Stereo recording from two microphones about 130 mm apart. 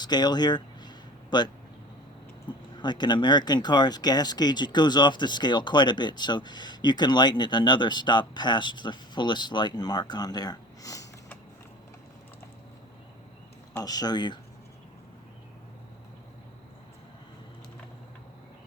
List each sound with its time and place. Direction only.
0.0 s a sound: 35° left (ahead or behind)
2.5 s speech: 35° left (ahead or behind)
13.7 s speech: 30° left (ahead or behind)